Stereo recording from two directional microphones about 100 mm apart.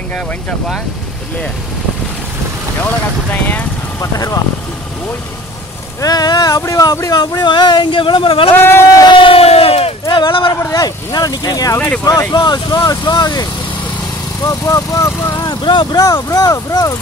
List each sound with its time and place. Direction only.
4.0 s speech: 35° left (ahead or behind)
5.9 s speech: 40° left (ahead or behind); by 8.5 s 60° left (ahead or behind)
8.5 s speech: 25° left (ahead or behind)
8.9 s crowd: 50° left (ahead or behind); by 9.9 s 80° left
10.0 s speech: 50° left (ahead or behind)
10.6 s speech: 35° left (ahead or behind)
15.6 s speech: 50° left (ahead or behind)
16.0 s speech: 35° left (ahead or behind)